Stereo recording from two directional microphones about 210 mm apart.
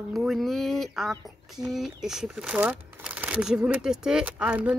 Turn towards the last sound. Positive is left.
turn(degrees=-5)  # may be behind; listen again after turning